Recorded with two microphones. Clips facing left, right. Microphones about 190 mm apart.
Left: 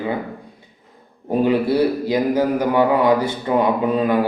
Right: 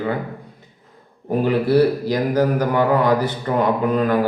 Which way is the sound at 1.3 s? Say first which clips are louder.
Left 1 dB; 15° left (ahead or behind).